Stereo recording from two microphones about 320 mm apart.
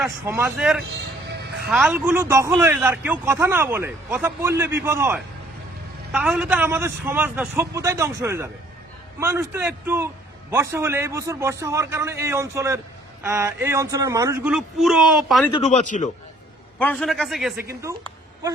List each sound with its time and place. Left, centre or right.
0.0 s a man's voice: centre
1.3 s music: right
1.7 s speech: centre
15.4 s speech: centre
16.7 s a man's voice: centre